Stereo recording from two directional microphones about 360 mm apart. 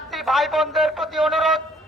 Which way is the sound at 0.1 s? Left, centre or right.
Centre.